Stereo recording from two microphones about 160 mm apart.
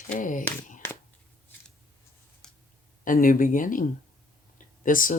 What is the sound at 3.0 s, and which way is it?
Speech, 55° left (ahead or behind).